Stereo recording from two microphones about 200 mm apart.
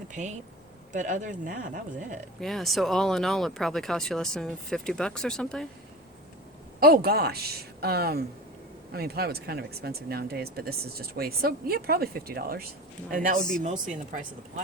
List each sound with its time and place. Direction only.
0.1 s speech: 40° right (ahead or behind)
2.4 s speech: centre (ahead or behind)
6.7 s speech: 50° right (ahead or behind)